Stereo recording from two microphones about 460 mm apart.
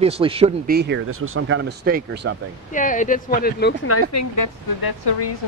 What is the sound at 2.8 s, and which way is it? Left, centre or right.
Speech, centre.